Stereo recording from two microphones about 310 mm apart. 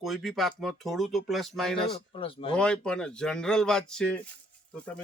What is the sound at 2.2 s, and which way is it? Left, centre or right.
Speech, centre.